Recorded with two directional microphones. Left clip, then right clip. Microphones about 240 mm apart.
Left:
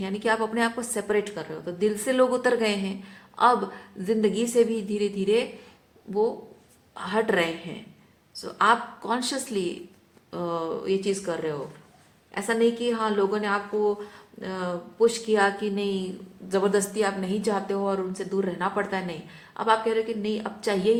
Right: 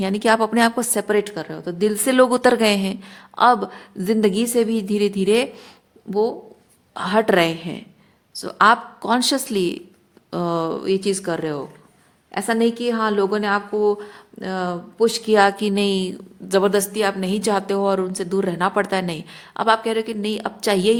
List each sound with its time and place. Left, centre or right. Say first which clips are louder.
0.0 s a woman's voice: right 8 dB; right